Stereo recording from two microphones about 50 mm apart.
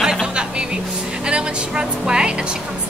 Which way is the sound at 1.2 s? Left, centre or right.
Centre.